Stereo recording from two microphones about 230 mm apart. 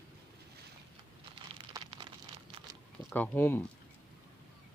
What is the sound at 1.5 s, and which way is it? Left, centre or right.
Rain on surface, right.